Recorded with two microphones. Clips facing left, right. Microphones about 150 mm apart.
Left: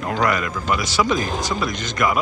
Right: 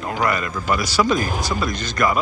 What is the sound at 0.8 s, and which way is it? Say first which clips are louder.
Speech: right 3 dB; 20° left (ahead or behind).